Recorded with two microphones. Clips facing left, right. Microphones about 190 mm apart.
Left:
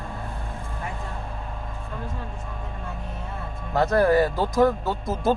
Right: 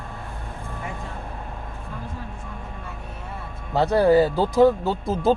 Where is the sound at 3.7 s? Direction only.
15° right (ahead or behind).